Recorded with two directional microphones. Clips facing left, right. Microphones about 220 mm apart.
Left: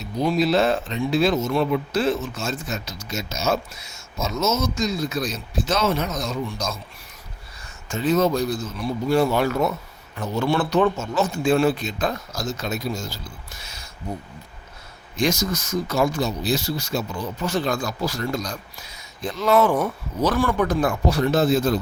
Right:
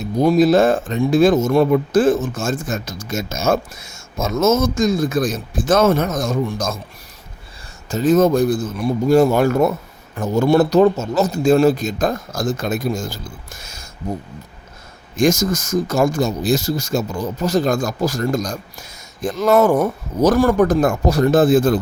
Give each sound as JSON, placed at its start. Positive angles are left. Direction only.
{"t": 0.0, "sound": "speech", "side_deg": -50}
{"t": 7.9, "sound": "speech", "side_deg": -45}